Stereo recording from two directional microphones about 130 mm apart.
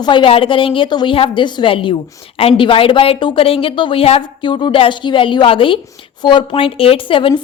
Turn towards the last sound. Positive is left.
turn(degrees=40)  # may be behind; listen again after turning